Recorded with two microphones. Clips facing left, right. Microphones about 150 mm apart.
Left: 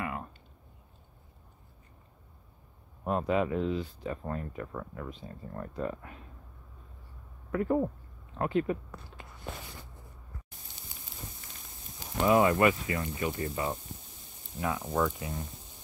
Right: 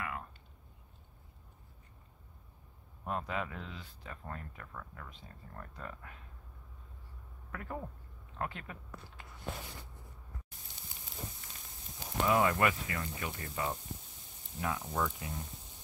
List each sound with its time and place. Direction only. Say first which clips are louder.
0.0 s a sound: left 5 dB; 25° left (ahead or behind)
3.0 s speech: left 9 dB; 25° left (ahead or behind)
7.5 s speech: left 14 dB; 30° left (ahead or behind)
12.3 s speech: left 6 dB; 10° left (ahead or behind)
15.0 s speech: left 8 dB; 5° left (ahead or behind)